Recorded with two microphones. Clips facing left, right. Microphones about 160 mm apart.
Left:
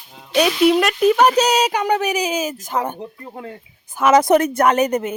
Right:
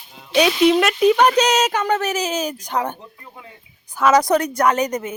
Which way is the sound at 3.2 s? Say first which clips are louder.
Left 9 dB; 50° left (ahead or behind).